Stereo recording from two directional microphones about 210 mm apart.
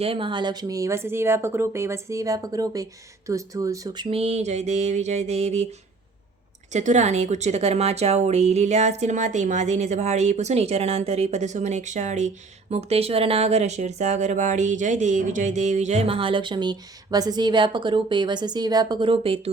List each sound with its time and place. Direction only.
0.0 s a woman's voice: 25° right (ahead or behind)
6.7 s a woman's voice: 35° right (ahead or behind)